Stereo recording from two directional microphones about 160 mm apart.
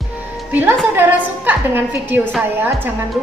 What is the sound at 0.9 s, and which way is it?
A woman's voice, 10° right (ahead or behind).